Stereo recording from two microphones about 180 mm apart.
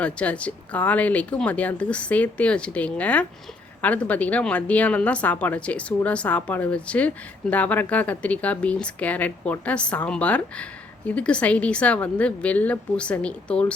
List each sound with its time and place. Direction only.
0.0 s speech: 5° left (ahead or behind)